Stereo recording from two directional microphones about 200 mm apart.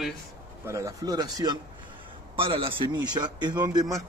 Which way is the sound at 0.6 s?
15° right (ahead or behind).